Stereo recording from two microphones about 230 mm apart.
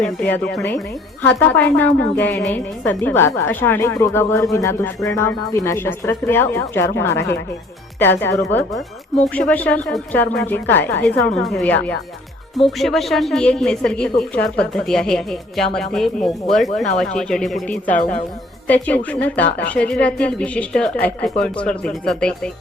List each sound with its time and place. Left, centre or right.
0.0 s a woman's voice: centre
17.9 s speech: left
18.7 s a woman's voice: centre